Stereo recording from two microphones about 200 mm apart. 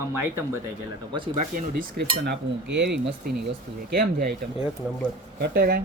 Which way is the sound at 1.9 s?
60° right (ahead or behind).